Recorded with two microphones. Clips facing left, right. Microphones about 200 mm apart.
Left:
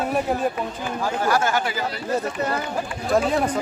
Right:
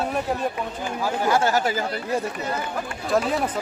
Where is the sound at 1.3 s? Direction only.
35° right (ahead or behind).